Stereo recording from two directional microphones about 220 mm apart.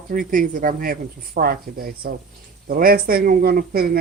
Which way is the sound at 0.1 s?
40° right (ahead or behind).